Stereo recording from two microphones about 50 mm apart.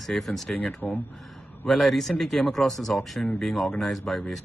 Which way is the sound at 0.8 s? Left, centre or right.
Centre.